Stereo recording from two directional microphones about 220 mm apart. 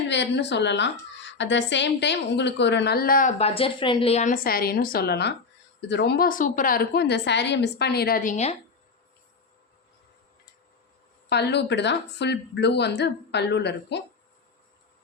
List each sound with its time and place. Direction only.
0.1 s a woman's voice: 50° left (ahead or behind); by 8.5 s 30° left (ahead or behind)
11.3 s a woman's voice: 50° left (ahead or behind)